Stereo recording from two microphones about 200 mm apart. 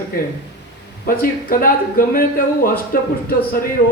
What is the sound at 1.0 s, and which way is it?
Speech, 45° left (ahead or behind).